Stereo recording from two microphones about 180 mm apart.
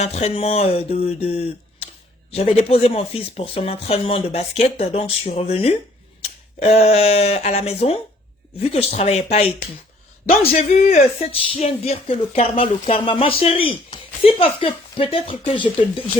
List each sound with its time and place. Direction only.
0.0 s speech: 35° left (ahead or behind)